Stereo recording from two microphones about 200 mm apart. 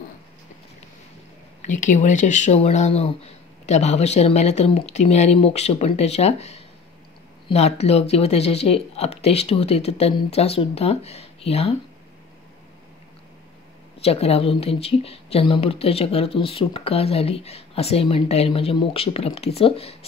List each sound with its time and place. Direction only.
1.6 s speech: 40° left (ahead or behind)
14.0 s speech: 30° left (ahead or behind)